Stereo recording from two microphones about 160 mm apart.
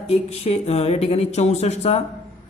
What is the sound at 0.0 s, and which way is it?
A woman's voice, 40° left (ahead or behind).